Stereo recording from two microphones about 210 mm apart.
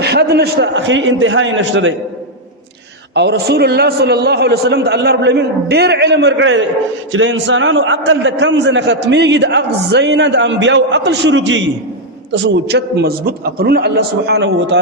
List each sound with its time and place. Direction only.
0.0 s a man's voice: 50° right (ahead or behind)
3.2 s a man's voice: 50° right (ahead or behind)